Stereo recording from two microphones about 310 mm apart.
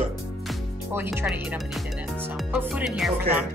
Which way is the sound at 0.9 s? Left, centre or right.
Centre.